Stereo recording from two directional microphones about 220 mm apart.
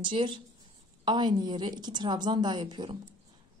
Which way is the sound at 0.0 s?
20° right (ahead or behind).